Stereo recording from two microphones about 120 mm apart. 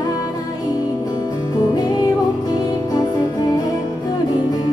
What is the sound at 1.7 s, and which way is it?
Music, 35° left (ahead or behind).